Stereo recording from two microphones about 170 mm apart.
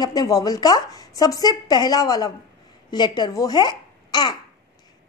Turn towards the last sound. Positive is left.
turn(degrees=25)  # may be behind; listen again after turning